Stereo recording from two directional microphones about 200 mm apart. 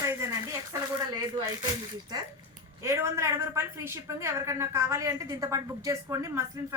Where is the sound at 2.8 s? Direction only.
15° right (ahead or behind).